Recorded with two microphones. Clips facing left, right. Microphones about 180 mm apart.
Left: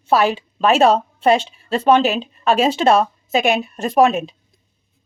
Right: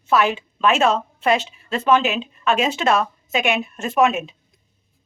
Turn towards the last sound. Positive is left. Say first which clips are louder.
# left 4 dB
turn(degrees=35)  # may be behind; listen again after turning